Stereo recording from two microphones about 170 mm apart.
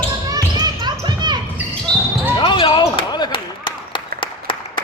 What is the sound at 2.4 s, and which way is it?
Basketball bounce, 25° left (ahead or behind).